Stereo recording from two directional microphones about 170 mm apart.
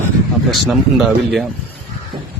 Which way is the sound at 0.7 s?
Centre (ahead or behind).